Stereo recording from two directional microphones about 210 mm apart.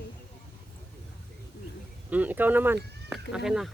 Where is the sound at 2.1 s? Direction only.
5° right (ahead or behind).